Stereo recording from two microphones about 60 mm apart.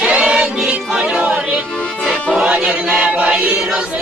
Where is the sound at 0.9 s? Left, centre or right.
Centre.